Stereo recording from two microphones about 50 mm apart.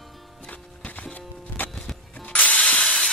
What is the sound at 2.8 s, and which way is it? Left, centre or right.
Steam, centre.